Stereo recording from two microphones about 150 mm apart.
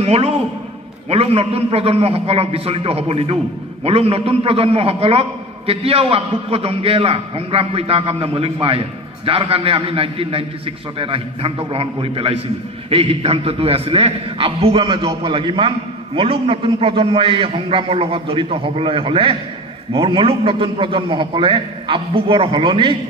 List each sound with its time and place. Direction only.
0.0 s a man's voice: 40° right (ahead or behind)